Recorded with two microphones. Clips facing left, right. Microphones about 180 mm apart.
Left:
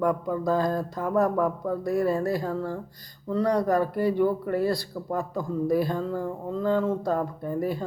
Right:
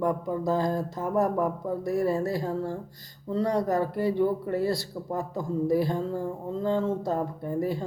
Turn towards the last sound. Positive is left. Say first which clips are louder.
# even
turn(degrees=-20)  # may be behind; listen again after turning